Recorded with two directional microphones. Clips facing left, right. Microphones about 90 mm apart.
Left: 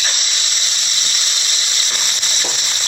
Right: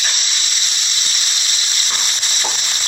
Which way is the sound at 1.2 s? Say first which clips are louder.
Even; 35° left (ahead or behind).